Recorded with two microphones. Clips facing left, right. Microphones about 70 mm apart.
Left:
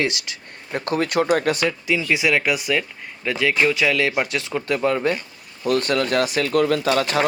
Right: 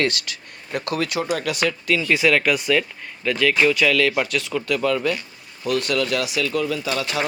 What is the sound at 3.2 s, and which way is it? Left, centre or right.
Speech, centre.